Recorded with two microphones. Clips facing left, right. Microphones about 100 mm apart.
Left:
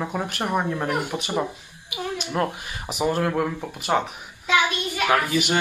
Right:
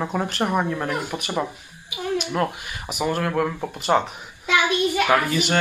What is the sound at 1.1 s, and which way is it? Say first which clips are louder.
A man's voice: even; 20° left (ahead or behind).